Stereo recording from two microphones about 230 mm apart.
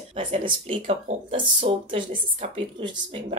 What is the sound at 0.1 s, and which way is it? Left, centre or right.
A woman's voice, right.